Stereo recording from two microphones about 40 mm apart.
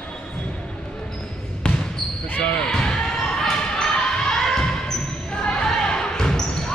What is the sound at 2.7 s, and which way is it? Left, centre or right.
Basketball bounce, centre.